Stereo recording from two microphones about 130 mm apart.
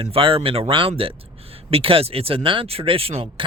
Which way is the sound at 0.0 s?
45° right (ahead or behind).